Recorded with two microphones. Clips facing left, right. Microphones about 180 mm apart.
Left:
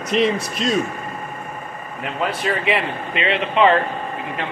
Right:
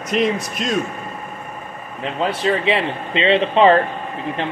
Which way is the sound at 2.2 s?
25° right (ahead or behind).